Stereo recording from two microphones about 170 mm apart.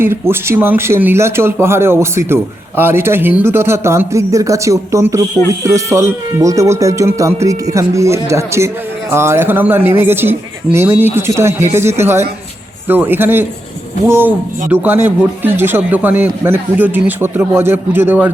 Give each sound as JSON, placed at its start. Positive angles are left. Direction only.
{"t": 0.0, "sound": "speech", "side_deg": -15}